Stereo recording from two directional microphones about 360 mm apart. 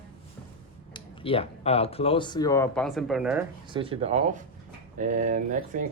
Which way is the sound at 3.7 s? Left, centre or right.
Centre.